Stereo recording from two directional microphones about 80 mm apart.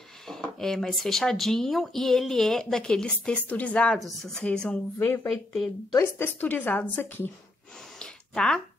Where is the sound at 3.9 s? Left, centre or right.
Centre.